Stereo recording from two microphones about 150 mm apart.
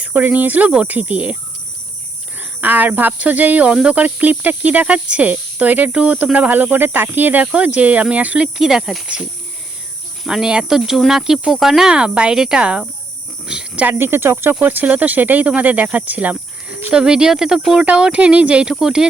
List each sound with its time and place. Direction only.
0.0 s speech: 10° right (ahead or behind)
2.4 s speech: 10° right (ahead or behind)
10.2 s speech: 5° right (ahead or behind)